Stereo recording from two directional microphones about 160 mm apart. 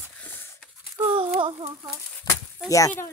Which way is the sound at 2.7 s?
20° left (ahead or behind).